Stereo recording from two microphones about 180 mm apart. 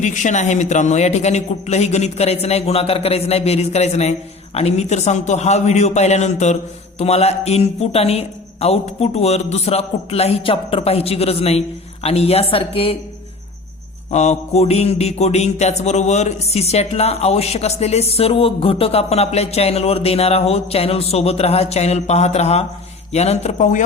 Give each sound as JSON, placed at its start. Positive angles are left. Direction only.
{"t": 0.0, "sound": "a man's voice", "side_deg": 45}
{"t": 14.1, "sound": "a man's voice", "side_deg": 40}